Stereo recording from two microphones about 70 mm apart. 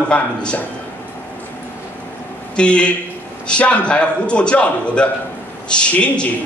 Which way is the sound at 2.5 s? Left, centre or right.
Centre.